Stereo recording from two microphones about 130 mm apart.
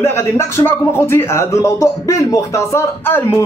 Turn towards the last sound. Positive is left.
turn(degrees=20)  # may be behind; listen again after turning